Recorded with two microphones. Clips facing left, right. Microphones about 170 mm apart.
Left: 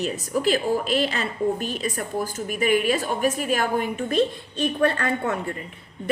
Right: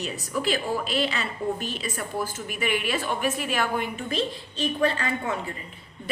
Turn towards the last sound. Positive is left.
turn(degrees=60)  # may be behind; listen again after turning